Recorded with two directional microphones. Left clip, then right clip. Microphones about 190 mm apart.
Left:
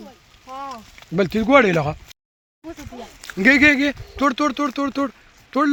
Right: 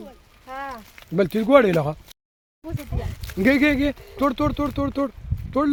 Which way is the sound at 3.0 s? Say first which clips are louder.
Left 1 dB; centre (ahead or behind).